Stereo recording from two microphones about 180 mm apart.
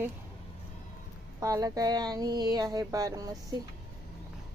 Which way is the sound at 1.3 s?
20° right (ahead or behind).